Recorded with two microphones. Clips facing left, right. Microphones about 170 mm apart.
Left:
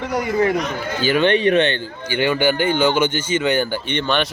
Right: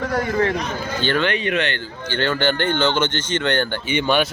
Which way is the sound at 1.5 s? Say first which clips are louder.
Left 6 dB; 25° left (ahead or behind).